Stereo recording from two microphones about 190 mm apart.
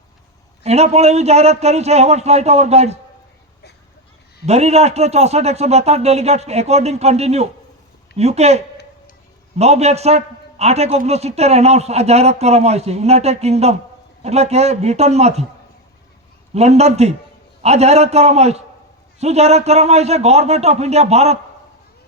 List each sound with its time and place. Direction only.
0.6 s a man's voice: 35° right (ahead or behind)
4.4 s a man's voice: 35° right (ahead or behind)
16.6 s a man's voice: 35° right (ahead or behind)